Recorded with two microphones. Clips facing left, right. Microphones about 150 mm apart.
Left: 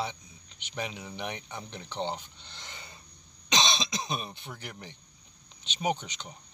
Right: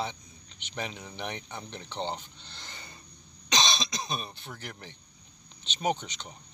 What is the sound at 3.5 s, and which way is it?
Throat clearing, 20° left (ahead or behind).